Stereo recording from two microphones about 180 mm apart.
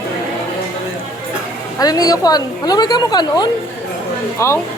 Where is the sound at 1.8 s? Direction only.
20° left (ahead or behind).